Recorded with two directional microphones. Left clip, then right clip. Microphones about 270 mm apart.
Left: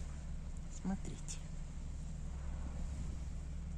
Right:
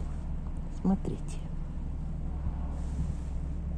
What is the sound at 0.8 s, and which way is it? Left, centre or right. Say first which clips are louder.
Speech: right 13 dB; centre.